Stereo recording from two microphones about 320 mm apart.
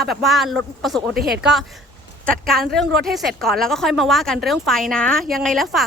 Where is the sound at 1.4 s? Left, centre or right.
Centre.